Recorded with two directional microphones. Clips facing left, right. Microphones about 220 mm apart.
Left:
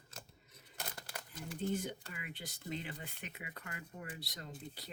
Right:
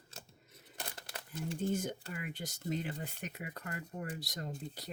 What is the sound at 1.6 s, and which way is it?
Speech, 45° right (ahead or behind).